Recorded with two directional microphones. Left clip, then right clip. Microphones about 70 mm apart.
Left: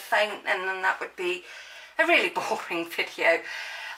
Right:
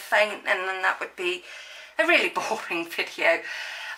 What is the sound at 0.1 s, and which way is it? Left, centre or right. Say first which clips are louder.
Speech: right 2 dB; right.